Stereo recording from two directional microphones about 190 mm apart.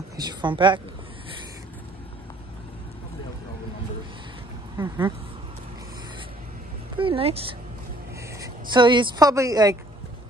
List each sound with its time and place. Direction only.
0.2 s speech: 25° right (ahead or behind)
4.7 s speech: 10° right (ahead or behind)
7.0 s speech: 30° right (ahead or behind)